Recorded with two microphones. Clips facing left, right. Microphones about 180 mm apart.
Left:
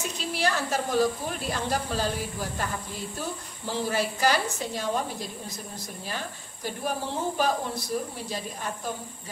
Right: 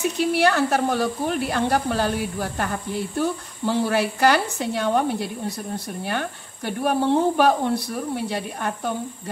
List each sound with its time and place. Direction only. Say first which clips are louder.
0.2 s speech: right 9 dB; 65° right (ahead or behind)